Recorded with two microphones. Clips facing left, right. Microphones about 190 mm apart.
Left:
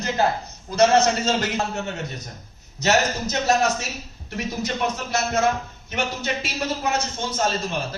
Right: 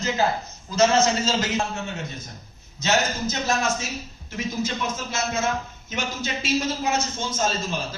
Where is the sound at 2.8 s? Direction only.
65° left (ahead or behind).